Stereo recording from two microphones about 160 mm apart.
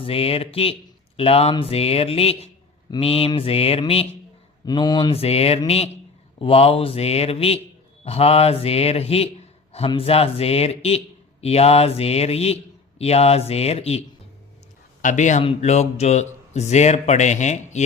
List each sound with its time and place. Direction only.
0.0 s speech: 35° left (ahead or behind)
4.6 s speech: 25° left (ahead or behind)
15.0 s speech: 50° left (ahead or behind)